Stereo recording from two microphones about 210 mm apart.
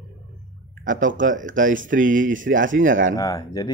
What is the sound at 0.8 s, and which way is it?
Speech, 40° right (ahead or behind).